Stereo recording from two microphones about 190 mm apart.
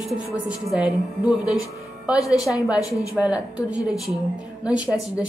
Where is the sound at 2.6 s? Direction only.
5° right (ahead or behind).